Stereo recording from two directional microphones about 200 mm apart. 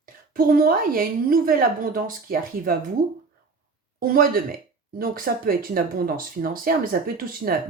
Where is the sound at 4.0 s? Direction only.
45° right (ahead or behind).